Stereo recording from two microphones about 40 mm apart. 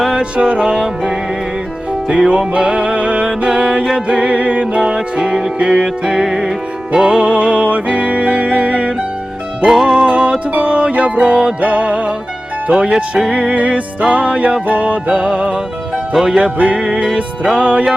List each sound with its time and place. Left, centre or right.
0.1 s music: right
9.6 s music: centre
10.1 s music: right
11.2 s music: right
11.6 s music: right
13.0 s music: right
13.5 s music: right
15.1 s music: right